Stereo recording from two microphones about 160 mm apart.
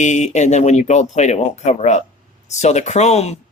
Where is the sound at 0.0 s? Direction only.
50° left (ahead or behind).